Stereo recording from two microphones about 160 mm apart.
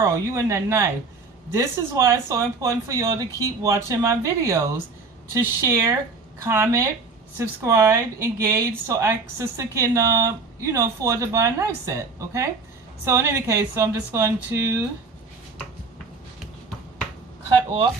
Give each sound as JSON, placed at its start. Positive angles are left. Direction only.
{"t": 0.0, "sound": "a woman's voice", "side_deg": -20}